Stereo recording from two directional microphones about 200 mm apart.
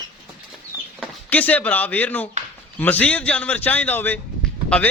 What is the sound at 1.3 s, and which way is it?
A man's voice, 10° left (ahead or behind).